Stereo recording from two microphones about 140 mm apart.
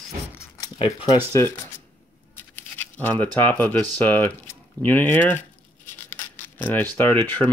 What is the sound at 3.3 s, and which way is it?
Speech, 15° left (ahead or behind).